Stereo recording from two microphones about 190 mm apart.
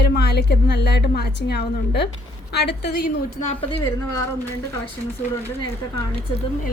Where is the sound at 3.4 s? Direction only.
30° left (ahead or behind).